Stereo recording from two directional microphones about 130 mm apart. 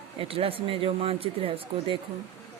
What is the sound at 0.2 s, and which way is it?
Speech, 45° right (ahead or behind).